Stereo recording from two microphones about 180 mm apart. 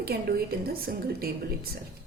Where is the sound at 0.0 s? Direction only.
60° right (ahead or behind).